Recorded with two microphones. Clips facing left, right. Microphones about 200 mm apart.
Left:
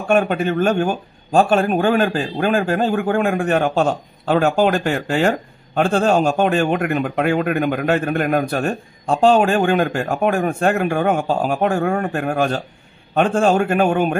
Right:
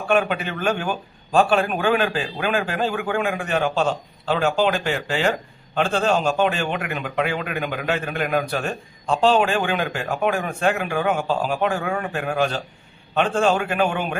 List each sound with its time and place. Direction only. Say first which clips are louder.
0.1 s speech: left 5 dB; 45° left (ahead or behind)